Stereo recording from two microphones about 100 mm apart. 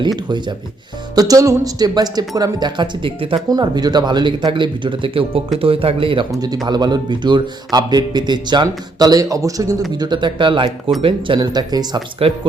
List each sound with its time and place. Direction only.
0.3 s a man's voice: 50° right (ahead or behind)
1.1 s a man's voice: 40° right (ahead or behind); by 3.4 s 65° right (ahead or behind)
3.5 s a man's voice: 40° right (ahead or behind); by 6.2 s 65° right (ahead or behind)
6.7 s a man's voice: 45° right (ahead or behind)
10.0 s a man's voice: 50° right (ahead or behind)
11.3 s a man's voice: 40° right (ahead or behind)